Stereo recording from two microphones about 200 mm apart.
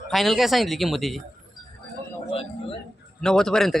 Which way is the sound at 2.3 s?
30° left (ahead or behind).